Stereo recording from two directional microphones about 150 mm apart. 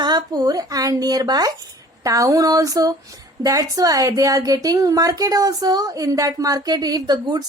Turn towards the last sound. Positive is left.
turn(degrees=-25)  # may be behind; listen again after turning